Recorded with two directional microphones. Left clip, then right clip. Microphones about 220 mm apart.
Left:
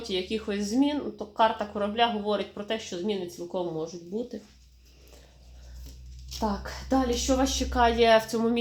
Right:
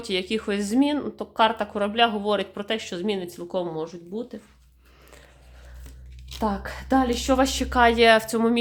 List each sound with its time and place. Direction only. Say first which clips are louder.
0.1 s speech: right 5 dB; 30° right (ahead or behind)
6.9 s speech: right 4 dB; 30° right (ahead or behind)